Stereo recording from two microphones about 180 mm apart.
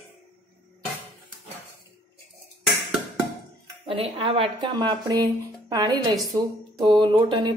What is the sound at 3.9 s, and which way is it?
Speech, 30° right (ahead or behind).